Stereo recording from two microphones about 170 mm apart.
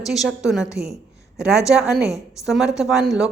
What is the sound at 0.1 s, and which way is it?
Speech, centre (ahead or behind).